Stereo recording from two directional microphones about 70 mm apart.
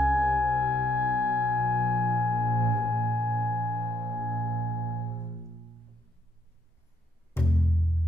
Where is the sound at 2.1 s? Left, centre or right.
Left.